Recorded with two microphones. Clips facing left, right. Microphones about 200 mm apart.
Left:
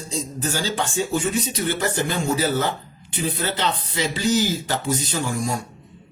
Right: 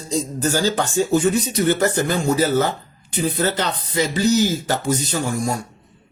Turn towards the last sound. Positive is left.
turn(degrees=-40)  # may be behind; listen again after turning